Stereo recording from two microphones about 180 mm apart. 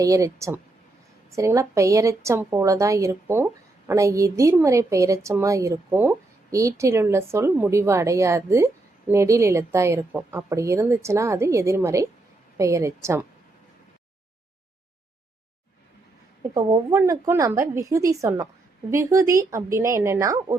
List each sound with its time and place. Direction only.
0.0 s a woman's voice: 15° right (ahead or behind)
16.4 s a woman's voice: 15° right (ahead or behind)